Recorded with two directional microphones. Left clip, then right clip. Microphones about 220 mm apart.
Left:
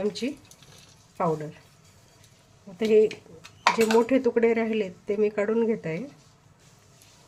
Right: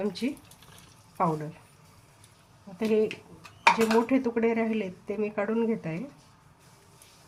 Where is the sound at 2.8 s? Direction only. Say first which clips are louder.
Left 6 dB; 25° left (ahead or behind).